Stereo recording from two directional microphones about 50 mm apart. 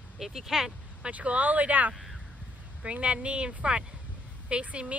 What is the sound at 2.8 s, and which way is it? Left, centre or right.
Speech, right.